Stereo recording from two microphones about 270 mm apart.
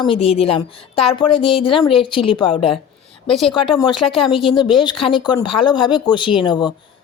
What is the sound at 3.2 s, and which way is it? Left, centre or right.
Speech, centre.